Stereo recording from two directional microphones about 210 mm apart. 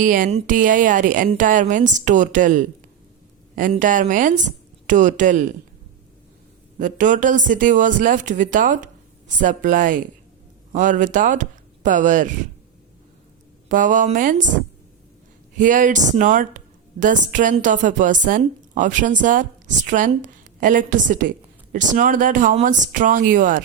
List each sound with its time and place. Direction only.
0.0 s speech: 40° right (ahead or behind)
6.7 s speech: 40° right (ahead or behind)
13.7 s speech: 40° right (ahead or behind)
15.5 s speech: 40° right (ahead or behind)